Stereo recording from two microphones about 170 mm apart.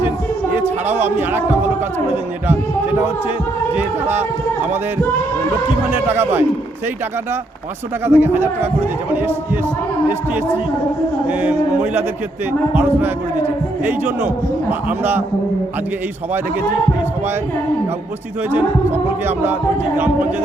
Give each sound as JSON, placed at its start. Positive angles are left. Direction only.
{"t": 0.5, "sound": "music", "side_deg": -10}
{"t": 1.0, "sound": "speech", "side_deg": -15}
{"t": 3.8, "sound": "speech", "side_deg": -15}
{"t": 5.9, "sound": "speech", "side_deg": -15}
{"t": 8.0, "sound": "speech", "side_deg": -15}
{"t": 11.3, "sound": "speech", "side_deg": -10}
{"t": 18.5, "sound": "speech", "side_deg": -15}